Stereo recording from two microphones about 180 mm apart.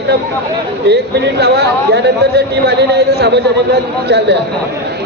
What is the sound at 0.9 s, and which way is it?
Speech, 65° right (ahead or behind).